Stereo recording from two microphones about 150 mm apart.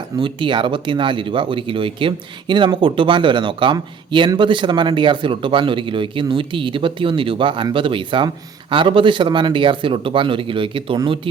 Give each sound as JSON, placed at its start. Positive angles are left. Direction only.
{"t": 0.2, "sound": "speech", "side_deg": -35}